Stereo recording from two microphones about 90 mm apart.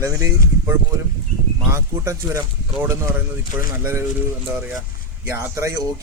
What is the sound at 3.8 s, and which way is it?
Speech, 30° right (ahead or behind).